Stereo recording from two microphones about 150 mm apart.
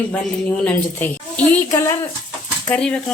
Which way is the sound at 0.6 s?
10° left (ahead or behind).